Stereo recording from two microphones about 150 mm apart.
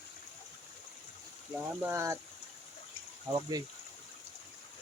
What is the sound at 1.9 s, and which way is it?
Speech, 20° right (ahead or behind).